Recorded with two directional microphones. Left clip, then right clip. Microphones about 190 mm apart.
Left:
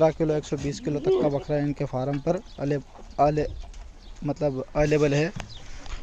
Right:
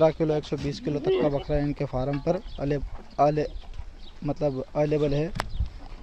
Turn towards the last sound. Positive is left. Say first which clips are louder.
# left 3 dB
turn(degrees=5)  # may be behind; listen again after turning